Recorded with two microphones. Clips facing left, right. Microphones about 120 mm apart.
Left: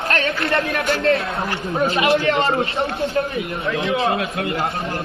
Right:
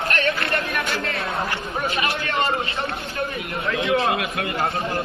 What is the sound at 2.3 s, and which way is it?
Speech, 25° left (ahead or behind).